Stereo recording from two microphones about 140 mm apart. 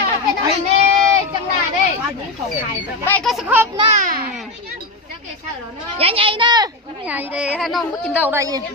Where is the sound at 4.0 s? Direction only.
90° right.